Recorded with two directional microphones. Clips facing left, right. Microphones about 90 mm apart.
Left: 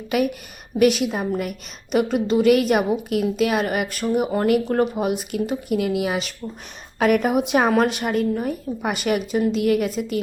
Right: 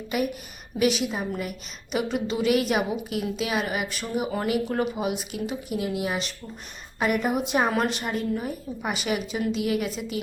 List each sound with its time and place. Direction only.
0.8 s a woman's voice: 55° left (ahead or behind)